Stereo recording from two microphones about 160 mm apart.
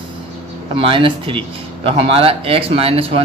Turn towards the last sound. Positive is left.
turn(degrees=-35)  # may be behind; listen again after turning